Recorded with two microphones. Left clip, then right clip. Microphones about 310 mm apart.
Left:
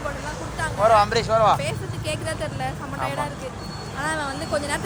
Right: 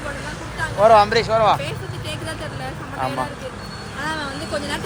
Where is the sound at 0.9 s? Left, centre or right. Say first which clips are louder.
Right 4 dB; centre.